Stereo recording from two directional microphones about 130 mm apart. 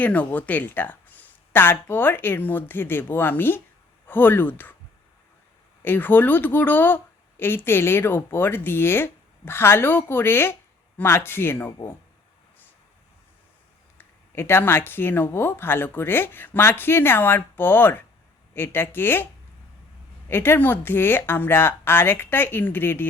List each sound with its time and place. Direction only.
0.0 s speech: 10° left (ahead or behind)
5.8 s speech: 15° left (ahead or behind)
14.0 s speech: 15° left (ahead or behind)